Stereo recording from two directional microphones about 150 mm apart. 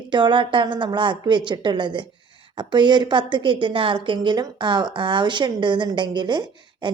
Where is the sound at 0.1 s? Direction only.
30° right (ahead or behind).